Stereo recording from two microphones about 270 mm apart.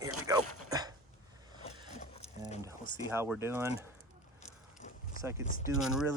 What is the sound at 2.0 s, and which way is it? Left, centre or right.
Mechanisms, left.